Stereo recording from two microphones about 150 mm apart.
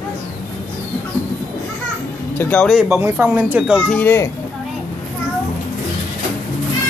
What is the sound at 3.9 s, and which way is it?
Speech, 15° left (ahead or behind).